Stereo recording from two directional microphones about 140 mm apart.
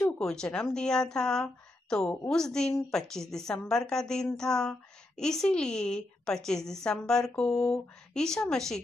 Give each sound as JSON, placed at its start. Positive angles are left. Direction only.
{"t": 0.0, "sound": "a woman's voice", "side_deg": 5}